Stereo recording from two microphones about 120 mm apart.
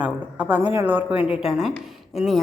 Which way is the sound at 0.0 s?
10° right (ahead or behind).